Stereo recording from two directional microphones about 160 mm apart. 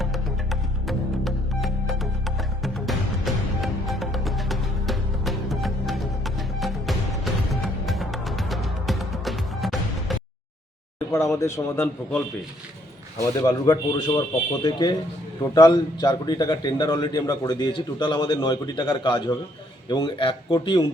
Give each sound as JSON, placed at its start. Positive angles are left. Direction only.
{"t": 0.0, "sound": "music", "side_deg": 0}
{"t": 11.1, "sound": "a man's voice", "side_deg": 15}